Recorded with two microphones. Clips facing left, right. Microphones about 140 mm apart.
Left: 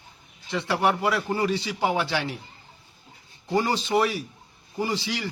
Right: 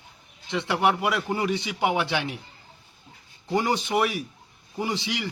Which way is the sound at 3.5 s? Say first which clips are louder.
Left 1 dB; 15° right (ahead or behind).